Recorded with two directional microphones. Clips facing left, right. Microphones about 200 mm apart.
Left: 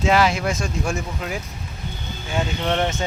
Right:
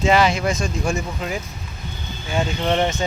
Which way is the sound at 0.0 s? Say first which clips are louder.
Right 1 dB; 5° left (ahead or behind).